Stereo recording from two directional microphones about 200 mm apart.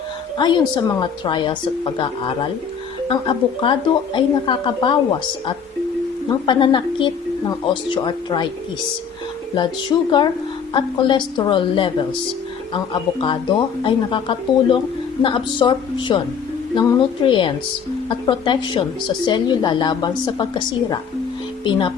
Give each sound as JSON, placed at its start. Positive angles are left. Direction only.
{"t": 0.3, "sound": "a woman's voice", "side_deg": 20}
{"t": 6.2, "sound": "a woman's voice", "side_deg": 20}
{"t": 9.9, "sound": "a woman's voice", "side_deg": 20}